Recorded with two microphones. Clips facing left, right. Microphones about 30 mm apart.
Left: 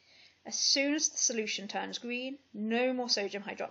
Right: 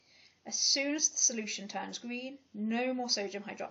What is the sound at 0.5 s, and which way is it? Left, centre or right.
Speech, centre.